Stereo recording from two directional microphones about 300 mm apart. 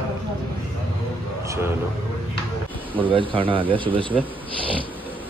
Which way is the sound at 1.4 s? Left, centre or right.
Centre.